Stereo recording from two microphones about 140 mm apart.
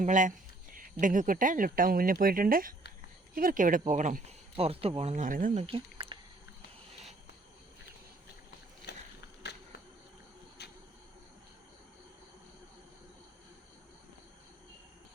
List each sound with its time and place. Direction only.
0.0 s speech: 65° right (ahead or behind)
4.5 s speech: 45° right (ahead or behind); by 5.6 s 65° right (ahead or behind)
5.6 s a sound: 40° right (ahead or behind)